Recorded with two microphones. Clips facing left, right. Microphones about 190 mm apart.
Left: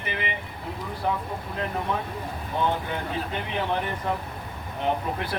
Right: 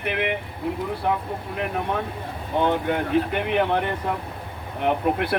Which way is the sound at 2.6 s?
65° right (ahead or behind).